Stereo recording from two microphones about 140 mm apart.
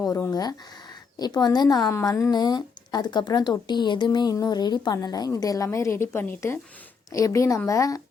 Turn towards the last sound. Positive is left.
turn(degrees=25)  # may be behind; listen again after turning